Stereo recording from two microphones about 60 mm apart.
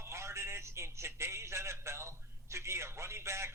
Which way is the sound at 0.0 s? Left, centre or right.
Right.